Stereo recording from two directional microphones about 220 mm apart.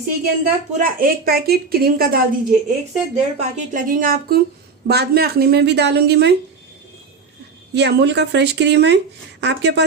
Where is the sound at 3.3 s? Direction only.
35° right (ahead or behind).